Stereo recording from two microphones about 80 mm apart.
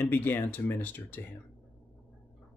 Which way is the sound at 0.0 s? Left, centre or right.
Left.